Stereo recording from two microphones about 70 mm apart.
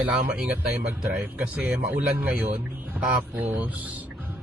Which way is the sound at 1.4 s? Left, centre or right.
Right.